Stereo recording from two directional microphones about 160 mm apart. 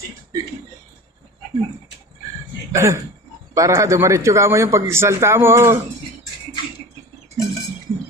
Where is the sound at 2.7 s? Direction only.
20° right (ahead or behind).